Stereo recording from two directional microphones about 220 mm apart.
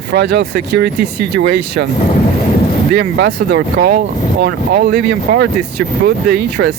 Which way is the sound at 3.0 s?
45° right (ahead or behind).